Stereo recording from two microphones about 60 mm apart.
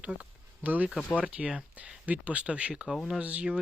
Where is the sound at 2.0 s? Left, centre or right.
Right.